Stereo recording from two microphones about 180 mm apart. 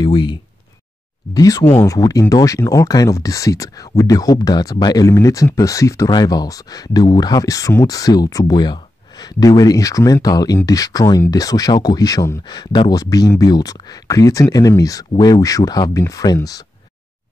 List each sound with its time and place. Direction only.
0.0 s speech: 25° left (ahead or behind)